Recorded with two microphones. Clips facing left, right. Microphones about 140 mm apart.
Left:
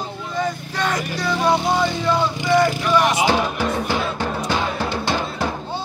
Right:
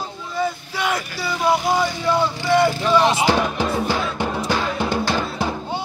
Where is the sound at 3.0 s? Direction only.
30° right (ahead or behind).